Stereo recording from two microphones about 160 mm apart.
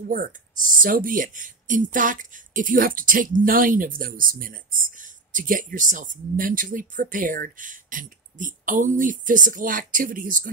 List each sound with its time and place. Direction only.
0.1 s speech: 60° right (ahead or behind)